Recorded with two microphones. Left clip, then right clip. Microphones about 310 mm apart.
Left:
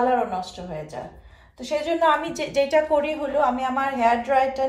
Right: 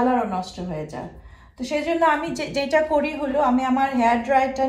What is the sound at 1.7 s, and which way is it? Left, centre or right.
A woman's voice, left.